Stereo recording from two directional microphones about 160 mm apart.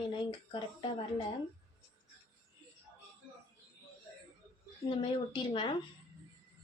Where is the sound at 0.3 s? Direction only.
30° left (ahead or behind).